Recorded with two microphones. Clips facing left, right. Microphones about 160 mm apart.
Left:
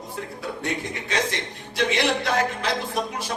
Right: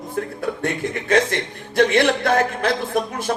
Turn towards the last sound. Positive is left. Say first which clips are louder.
# right 6 dB
turn(degrees=-60)  # may be behind; listen again after turning